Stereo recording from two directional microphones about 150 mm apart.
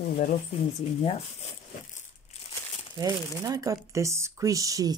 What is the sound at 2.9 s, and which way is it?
Speech, 25° right (ahead or behind).